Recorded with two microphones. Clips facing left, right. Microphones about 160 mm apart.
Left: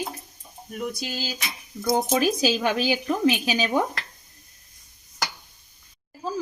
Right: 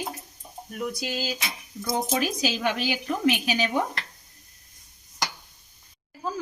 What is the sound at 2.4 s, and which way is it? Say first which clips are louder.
Speech: left 4 dB; 35° left (ahead or behind).